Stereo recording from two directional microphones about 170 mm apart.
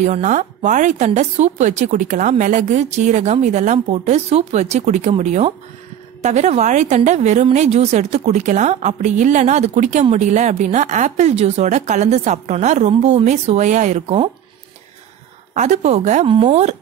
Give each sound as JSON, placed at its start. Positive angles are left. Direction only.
{"t": 0.0, "sound": "a woman's voice", "side_deg": -45}
{"t": 15.5, "sound": "a woman's voice", "side_deg": -45}